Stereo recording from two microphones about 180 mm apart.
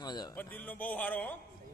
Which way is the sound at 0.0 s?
25° left (ahead or behind).